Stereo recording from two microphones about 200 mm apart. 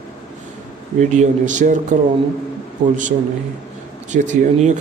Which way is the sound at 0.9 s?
35° right (ahead or behind).